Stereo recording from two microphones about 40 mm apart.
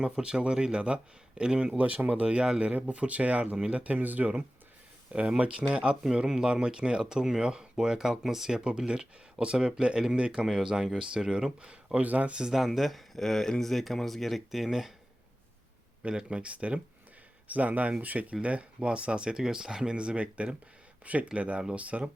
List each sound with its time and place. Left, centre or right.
0.0 s speech: right
1.8 s speech: right
2.2 s speech: right
2.6 s speech: right
5.4 s speech: right; by 8.6 s centre
8.9 s speech: right
11.9 s speech: right
12.4 s speech: centre
12.6 s speech: centre
16.0 s speech: right
17.5 s speech: right
18.4 s speech: right